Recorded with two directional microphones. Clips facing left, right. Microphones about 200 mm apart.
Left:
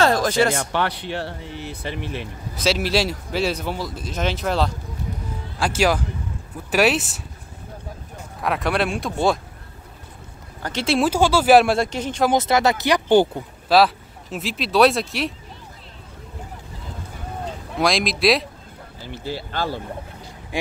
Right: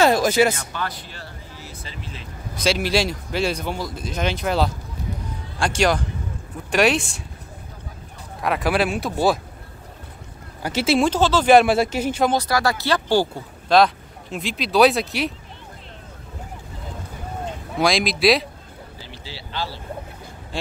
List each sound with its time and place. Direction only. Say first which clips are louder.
0.0 s speech: right 2 dB; 10° right (ahead or behind)
0.6 s speech: left 6 dB; 70° left (ahead or behind)
2.5 s speech: even; 5° left (ahead or behind)
8.4 s speech: right 1 dB; centre (ahead or behind)
10.6 s speech: right 2 dB; 5° right (ahead or behind)
11.1 s speech: left 2 dB; 10° left (ahead or behind); by 12.3 s 5° right (ahead or behind)
12.3 s speech: left 3 dB; 20° left (ahead or behind)
13.7 s speech: even; 5° left (ahead or behind)
17.7 s speech: right 1 dB; centre (ahead or behind)
19.0 s speech: left 13 dB; 50° left (ahead or behind)